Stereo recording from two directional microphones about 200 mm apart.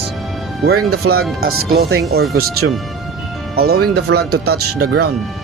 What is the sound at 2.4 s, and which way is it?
Speech, 90° right.